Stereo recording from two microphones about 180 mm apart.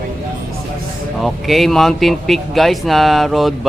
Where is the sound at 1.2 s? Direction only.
Centre (ahead or behind).